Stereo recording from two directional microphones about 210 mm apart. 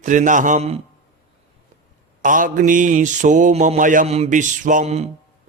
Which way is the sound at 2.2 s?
40° right (ahead or behind).